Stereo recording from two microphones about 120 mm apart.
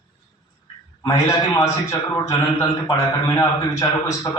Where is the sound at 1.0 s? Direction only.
25° left (ahead or behind).